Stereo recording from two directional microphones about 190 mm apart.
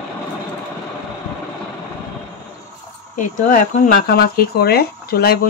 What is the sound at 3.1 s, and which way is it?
Speech, 45° left (ahead or behind).